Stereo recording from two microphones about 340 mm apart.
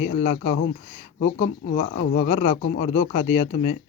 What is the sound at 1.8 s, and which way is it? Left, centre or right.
Speech, centre.